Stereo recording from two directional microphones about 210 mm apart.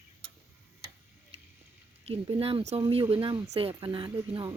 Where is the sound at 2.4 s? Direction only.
25° right (ahead or behind).